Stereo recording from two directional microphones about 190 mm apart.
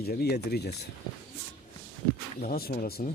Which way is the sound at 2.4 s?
50° left (ahead or behind).